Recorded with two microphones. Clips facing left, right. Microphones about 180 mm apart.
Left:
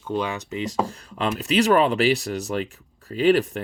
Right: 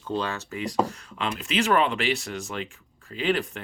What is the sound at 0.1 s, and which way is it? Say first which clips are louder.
Speech: left 3 dB; 15° left (ahead or behind).